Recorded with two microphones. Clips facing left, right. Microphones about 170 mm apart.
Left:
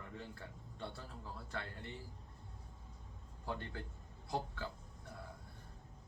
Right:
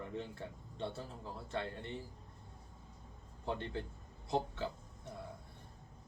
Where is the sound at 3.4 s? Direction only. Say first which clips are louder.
Right 5 dB; 25° right (ahead or behind).